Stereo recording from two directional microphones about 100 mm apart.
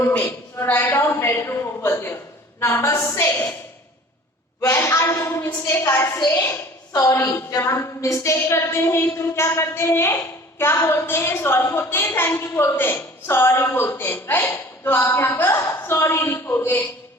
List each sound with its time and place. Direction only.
0.6 s a woman's voice: 25° left (ahead or behind)
4.6 s a woman's voice: 30° left (ahead or behind)
6.1 s a woman's voice: 40° left (ahead or behind)
7.1 s a woman's voice: 25° left (ahead or behind)